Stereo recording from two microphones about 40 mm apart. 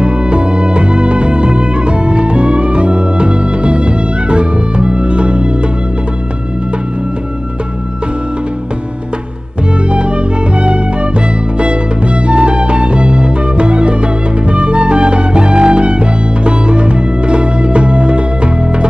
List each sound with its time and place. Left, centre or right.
0.0 s music: right
9.8 s music: right